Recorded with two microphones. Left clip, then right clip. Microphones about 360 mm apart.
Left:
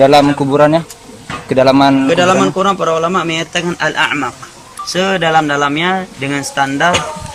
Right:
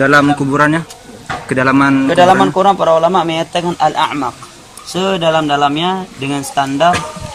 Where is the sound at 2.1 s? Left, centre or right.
Right.